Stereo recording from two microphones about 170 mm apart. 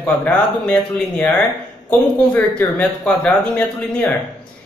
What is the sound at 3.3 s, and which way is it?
Speech, 5° left (ahead or behind).